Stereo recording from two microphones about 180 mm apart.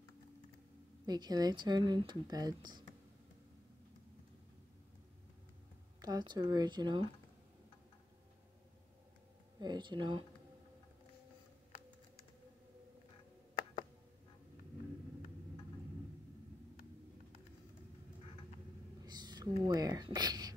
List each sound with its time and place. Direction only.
1.0 s speech: 20° right (ahead or behind)
5.9 s speech: 20° right (ahead or behind)
9.6 s speech: 25° right (ahead or behind)
19.0 s a sound: 25° right (ahead or behind)